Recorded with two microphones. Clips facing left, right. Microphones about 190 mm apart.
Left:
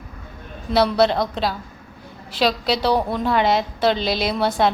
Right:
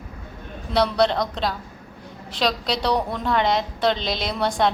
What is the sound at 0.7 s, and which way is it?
A woman's voice, 5° left (ahead or behind).